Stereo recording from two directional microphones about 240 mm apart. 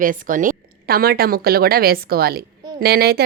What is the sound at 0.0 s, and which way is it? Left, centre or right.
A woman's voice, right.